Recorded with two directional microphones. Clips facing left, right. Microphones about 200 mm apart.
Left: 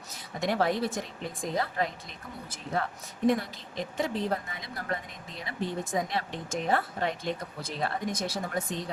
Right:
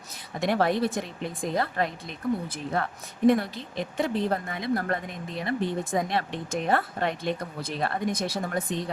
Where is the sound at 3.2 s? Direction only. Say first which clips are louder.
Right 5 dB; 60° right (ahead or behind).